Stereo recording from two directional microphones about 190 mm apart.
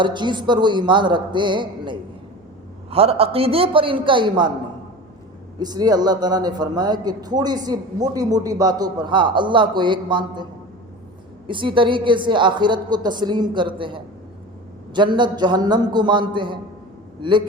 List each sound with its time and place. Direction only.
0.0 s a man's voice: 25° right (ahead or behind)
5.5 s a man's voice: 20° right (ahead or behind)
11.4 s a man's voice: 25° right (ahead or behind)